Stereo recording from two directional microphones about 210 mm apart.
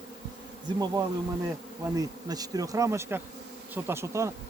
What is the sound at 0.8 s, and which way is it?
Bee, 20° right (ahead or behind).